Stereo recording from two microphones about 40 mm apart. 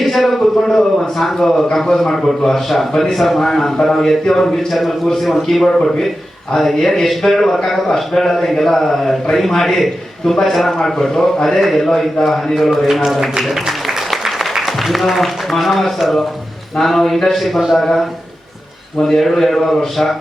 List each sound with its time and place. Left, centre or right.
0.0 s a man's voice: centre
11.4 s speech: centre
13.4 s a sound: centre
16.7 s a man's voice: centre